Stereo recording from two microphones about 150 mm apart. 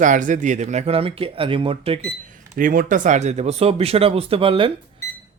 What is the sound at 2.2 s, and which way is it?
Speech, 60° right (ahead or behind).